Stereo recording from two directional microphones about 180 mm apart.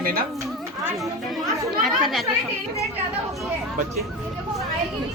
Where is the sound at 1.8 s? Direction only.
Centre (ahead or behind).